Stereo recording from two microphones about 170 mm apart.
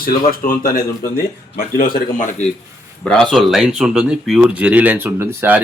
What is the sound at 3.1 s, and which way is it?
Speech, centre (ahead or behind).